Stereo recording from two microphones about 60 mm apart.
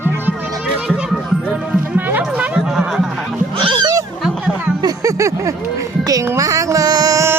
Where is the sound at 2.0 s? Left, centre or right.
Right.